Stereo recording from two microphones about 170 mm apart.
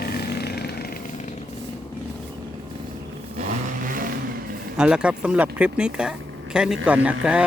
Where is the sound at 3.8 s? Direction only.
55° right (ahead or behind).